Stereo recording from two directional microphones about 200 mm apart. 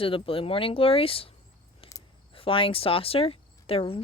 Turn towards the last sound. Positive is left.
turn(degrees=30)  # may be behind; listen again after turning